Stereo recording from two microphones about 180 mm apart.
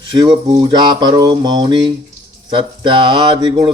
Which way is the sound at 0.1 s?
25° right (ahead or behind).